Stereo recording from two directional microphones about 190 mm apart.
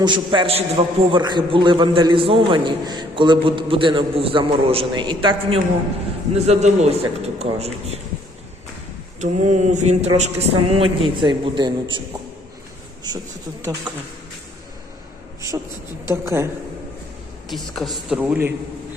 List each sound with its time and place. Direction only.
0.0 s a man's voice: 25° right (ahead or behind)
9.2 s speech: 40° right (ahead or behind)
13.1 s a man's voice: 20° right (ahead or behind)
15.4 s a woman's voice: 15° right (ahead or behind)
17.5 s a man's voice: centre (ahead or behind)